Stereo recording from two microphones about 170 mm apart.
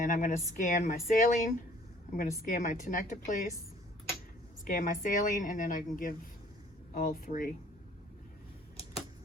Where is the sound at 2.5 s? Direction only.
50° left (ahead or behind).